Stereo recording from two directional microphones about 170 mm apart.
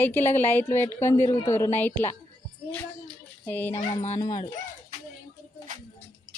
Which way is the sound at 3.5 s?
10° left (ahead or behind).